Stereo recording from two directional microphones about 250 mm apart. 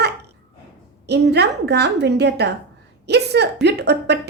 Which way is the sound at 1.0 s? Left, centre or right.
Right.